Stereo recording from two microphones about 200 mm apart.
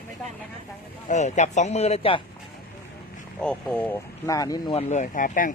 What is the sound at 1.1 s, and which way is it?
Speech, 35° left (ahead or behind).